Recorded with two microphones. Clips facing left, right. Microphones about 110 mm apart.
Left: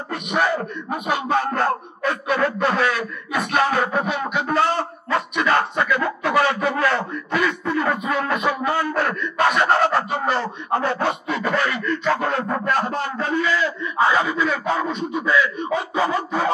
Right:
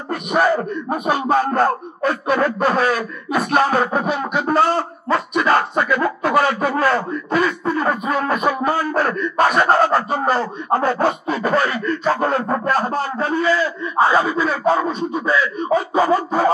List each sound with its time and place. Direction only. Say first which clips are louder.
0.1 s speech: right 5 dB; 40° right (ahead or behind)